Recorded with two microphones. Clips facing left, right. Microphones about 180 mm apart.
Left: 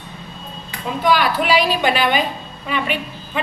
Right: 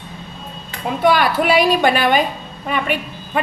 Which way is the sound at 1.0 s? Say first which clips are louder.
Right 2 dB; 50° right (ahead or behind).